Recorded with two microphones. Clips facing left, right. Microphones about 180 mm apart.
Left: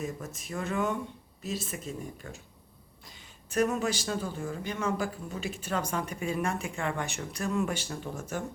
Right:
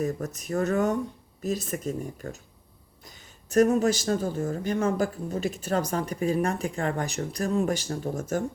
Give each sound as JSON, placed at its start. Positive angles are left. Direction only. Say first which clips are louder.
{"t": 0.0, "sound": "speech", "louder": "right 7 dB", "side_deg": -45}